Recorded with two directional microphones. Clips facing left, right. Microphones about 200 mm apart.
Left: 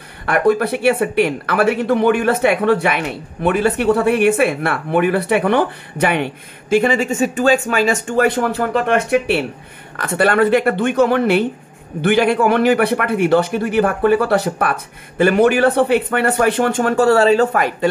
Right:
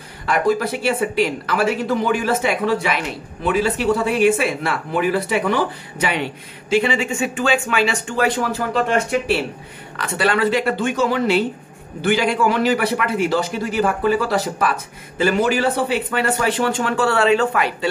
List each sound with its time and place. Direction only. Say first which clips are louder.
0.3 s speech: left 4 dB; 60° left (ahead or behind)